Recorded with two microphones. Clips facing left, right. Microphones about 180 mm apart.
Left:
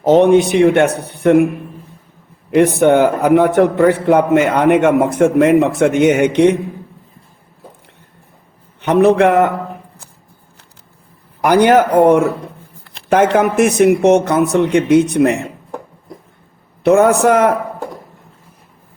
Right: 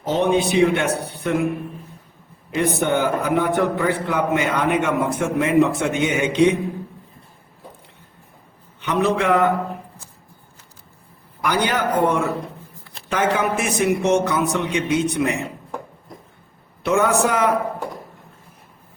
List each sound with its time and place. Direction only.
0.0 s a man's voice: 70° left (ahead or behind)
2.5 s a man's voice: 75° left (ahead or behind)
8.8 s a man's voice: 70° left (ahead or behind)
11.3 s a man's voice: 85° left
16.9 s a man's voice: 60° left (ahead or behind)